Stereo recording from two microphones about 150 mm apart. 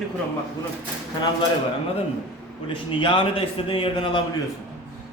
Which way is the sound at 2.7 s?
35° left (ahead or behind).